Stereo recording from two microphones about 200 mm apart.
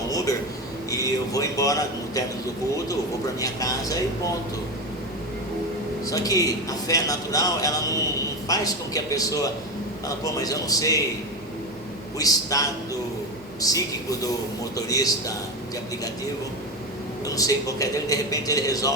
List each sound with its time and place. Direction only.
0.9 s a man's voice: 15° left (ahead or behind)
6.1 s a man's voice: 15° left (ahead or behind)
12.2 s a man's voice: 15° left (ahead or behind)
17.2 s a man's voice: 15° left (ahead or behind)